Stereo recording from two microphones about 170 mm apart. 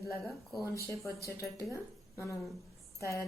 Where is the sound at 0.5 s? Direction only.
20° left (ahead or behind).